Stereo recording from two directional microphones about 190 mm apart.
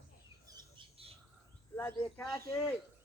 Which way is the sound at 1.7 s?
15° left (ahead or behind).